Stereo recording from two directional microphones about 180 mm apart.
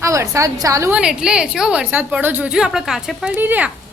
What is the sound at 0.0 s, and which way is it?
A woman's voice, 15° right (ahead or behind).